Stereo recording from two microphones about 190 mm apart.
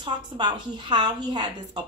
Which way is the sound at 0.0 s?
25° right (ahead or behind).